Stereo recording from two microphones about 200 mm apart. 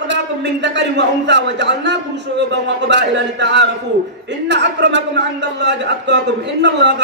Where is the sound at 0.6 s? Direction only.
60° right (ahead or behind).